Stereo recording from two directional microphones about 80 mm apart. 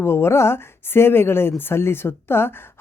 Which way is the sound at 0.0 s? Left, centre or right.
Left.